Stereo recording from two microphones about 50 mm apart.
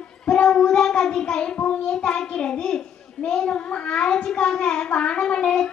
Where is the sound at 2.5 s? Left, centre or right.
Centre.